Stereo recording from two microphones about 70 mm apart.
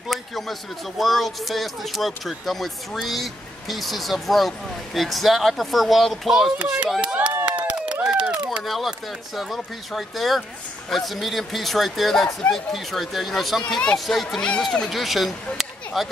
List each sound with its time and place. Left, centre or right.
0.1 s speech: centre
6.6 s speech: centre
7.0 s a sound: centre
7.6 s run: centre
8.6 s speech: centre
14.9 s speech: centre